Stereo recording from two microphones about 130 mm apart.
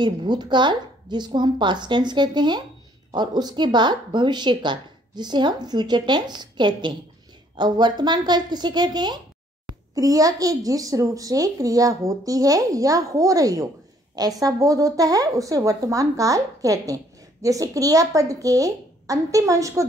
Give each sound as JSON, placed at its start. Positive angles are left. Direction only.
{"t": 0.0, "sound": "a woman's voice", "side_deg": -35}